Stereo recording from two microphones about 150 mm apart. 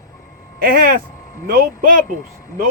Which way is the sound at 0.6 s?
75° right (ahead or behind).